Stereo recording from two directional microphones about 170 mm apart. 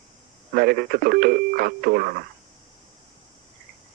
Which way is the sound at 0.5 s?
60° right (ahead or behind).